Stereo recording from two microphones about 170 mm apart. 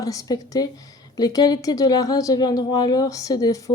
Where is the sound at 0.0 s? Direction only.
20° left (ahead or behind).